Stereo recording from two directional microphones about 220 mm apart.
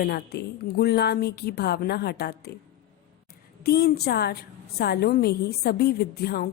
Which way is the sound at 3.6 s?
45° left (ahead or behind).